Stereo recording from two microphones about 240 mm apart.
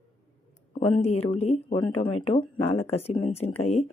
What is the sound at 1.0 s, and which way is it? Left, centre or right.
Speech, left.